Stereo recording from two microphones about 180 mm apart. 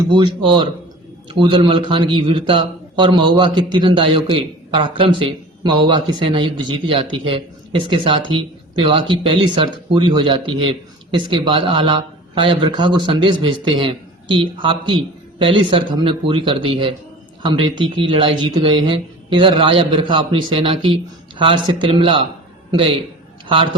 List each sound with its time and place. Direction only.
0.1 s a man's voice: 25° right (ahead or behind)